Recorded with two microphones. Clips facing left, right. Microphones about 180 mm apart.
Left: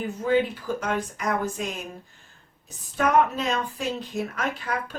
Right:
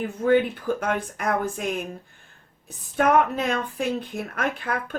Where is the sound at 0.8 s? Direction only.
55° right (ahead or behind).